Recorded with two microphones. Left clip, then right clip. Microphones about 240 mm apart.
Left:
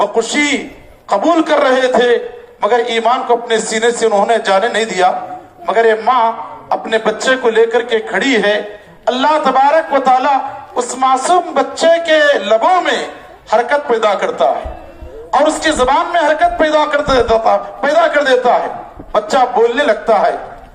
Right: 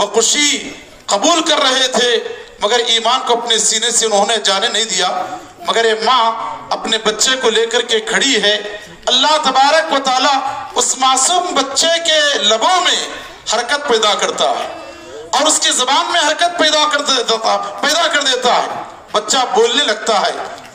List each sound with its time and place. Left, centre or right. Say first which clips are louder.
0.0 s a man's voice: even; right